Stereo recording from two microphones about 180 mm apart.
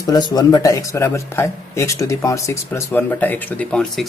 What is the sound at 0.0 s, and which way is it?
Speech, 25° left (ahead or behind).